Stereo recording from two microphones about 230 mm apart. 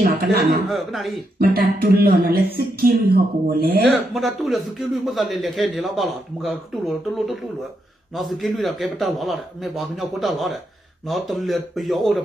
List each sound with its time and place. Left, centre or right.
0.0 s speech: right
0.7 s a man's voice: centre
1.4 s speech: right
3.8 s a man's voice: centre